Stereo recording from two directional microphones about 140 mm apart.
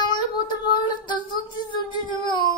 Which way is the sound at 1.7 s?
35° left (ahead or behind).